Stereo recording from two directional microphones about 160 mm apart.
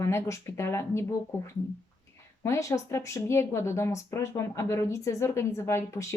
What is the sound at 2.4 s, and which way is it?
Speech, 20° left (ahead or behind).